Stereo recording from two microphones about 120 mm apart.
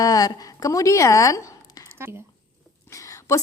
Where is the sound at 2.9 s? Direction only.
25° left (ahead or behind).